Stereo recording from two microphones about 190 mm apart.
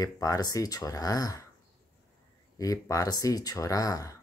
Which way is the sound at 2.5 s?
15° left (ahead or behind).